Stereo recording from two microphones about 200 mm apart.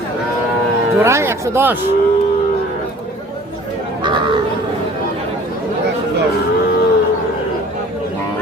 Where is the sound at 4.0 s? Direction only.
25° right (ahead or behind).